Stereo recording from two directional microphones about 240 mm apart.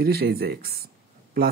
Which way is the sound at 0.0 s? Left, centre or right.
Right.